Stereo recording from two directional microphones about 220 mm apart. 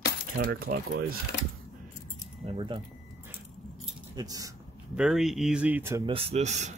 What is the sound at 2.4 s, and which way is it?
Speech, 20° right (ahead or behind).